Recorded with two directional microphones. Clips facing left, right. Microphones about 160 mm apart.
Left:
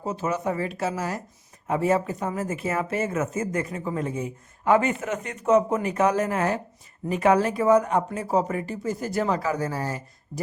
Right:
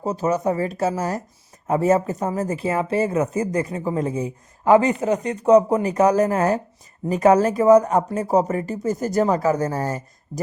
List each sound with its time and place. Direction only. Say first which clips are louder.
0.0 s speech: right 6 dB; 40° right (ahead or behind)